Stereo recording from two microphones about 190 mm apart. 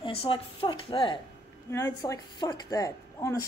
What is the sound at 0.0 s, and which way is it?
Speech, 30° left (ahead or behind).